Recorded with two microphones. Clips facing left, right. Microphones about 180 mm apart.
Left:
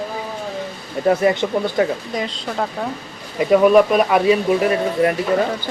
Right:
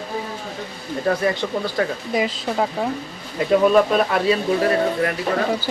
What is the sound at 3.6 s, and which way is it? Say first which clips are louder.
Speech: left 3 dB; 10° left (ahead or behind).